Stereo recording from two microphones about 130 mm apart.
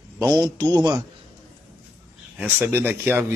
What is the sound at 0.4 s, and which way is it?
Speech, 25° right (ahead or behind).